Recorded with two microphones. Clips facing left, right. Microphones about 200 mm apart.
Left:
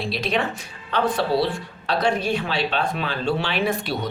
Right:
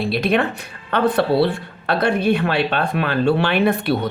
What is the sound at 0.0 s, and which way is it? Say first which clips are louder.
Speech: right 6 dB; 55° right (ahead or behind).